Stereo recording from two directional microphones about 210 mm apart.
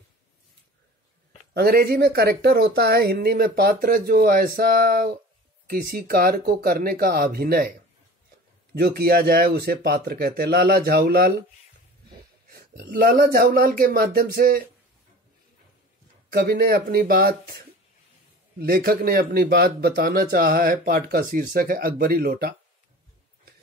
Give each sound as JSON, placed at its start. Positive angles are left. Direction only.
{"t": 1.5, "sound": "a man's voice", "side_deg": -50}
{"t": 8.7, "sound": "a man's voice", "side_deg": -50}
{"t": 12.4, "sound": "a man's voice", "side_deg": -45}
{"t": 16.3, "sound": "a man's voice", "side_deg": -50}
{"t": 18.6, "sound": "a man's voice", "side_deg": -45}